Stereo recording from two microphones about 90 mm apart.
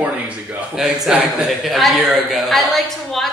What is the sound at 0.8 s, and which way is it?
A man's voice, 5° right (ahead or behind).